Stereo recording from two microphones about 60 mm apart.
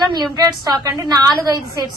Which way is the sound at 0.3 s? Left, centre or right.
Right.